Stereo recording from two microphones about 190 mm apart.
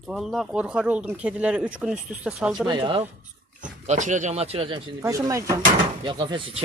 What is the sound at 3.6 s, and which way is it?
Speech, 40° right (ahead or behind).